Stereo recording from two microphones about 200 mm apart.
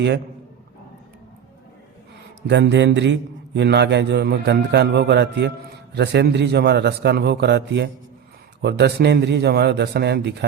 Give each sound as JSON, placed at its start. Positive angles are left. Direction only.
{"t": 2.5, "sound": "a man's voice", "side_deg": -60}